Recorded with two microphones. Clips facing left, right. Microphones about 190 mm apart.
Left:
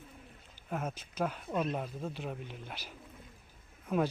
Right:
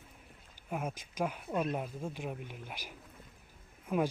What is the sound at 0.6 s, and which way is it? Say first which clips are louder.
Speech: even; 10° right (ahead or behind).